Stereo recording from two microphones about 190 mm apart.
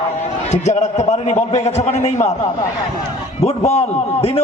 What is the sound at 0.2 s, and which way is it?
A man's voice, 35° left (ahead or behind).